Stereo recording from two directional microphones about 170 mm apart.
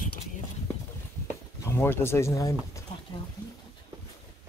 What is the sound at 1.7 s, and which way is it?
Speech, 15° left (ahead or behind).